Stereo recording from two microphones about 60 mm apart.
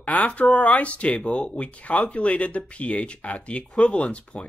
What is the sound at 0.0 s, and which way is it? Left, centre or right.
Speech, left.